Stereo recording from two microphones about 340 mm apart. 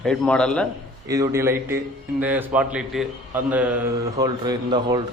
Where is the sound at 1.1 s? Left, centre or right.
Centre.